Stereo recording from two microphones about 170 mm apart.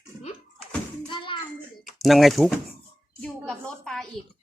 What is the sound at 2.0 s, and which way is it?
Speech, centre (ahead or behind).